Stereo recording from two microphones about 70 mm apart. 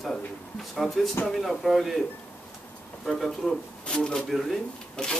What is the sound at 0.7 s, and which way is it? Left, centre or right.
Speech, centre.